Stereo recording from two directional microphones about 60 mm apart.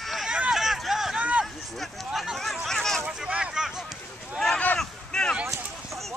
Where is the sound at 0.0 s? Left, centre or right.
Centre.